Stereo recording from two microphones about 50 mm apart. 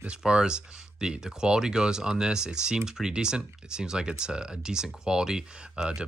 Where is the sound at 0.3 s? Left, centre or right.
Centre.